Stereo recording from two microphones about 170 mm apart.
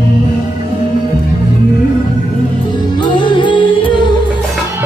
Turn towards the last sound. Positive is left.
turn(degrees=30)  # may be behind; listen again after turning